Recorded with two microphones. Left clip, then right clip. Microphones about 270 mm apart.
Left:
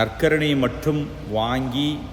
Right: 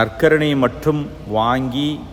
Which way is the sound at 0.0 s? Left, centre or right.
Centre.